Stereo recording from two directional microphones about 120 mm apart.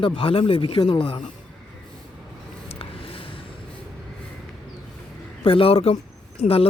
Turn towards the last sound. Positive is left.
turn(degrees=55)  # may be behind; listen again after turning